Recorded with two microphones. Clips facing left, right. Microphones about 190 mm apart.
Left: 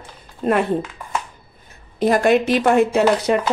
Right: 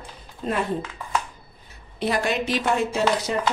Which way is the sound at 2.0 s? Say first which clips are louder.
Left 9 dB; 50° left (ahead or behind).